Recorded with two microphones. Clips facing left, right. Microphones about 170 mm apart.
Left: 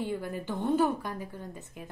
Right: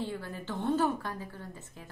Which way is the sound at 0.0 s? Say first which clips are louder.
Left 4 dB; 15° left (ahead or behind).